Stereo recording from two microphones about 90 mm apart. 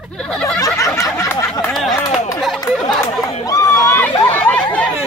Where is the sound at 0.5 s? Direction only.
35° left (ahead or behind).